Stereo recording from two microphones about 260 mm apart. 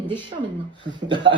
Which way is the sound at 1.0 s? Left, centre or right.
Centre.